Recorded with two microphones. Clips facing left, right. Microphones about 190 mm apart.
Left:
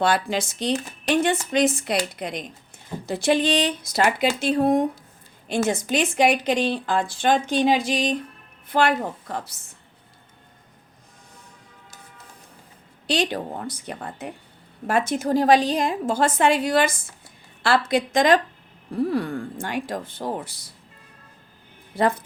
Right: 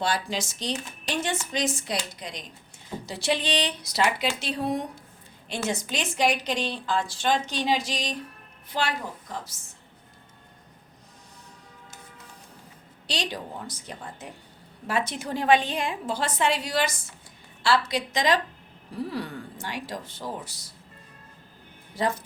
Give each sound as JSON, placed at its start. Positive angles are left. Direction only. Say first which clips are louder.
{"t": 0.0, "sound": "a woman's voice", "louder": "left 6 dB", "side_deg": 60}
{"t": 13.1, "sound": "speech", "louder": "left 8 dB", "side_deg": 55}
{"t": 14.8, "sound": "a woman's voice", "louder": "left 7 dB", "side_deg": 50}
{"t": 22.0, "sound": "speech", "louder": "left 6 dB", "side_deg": 55}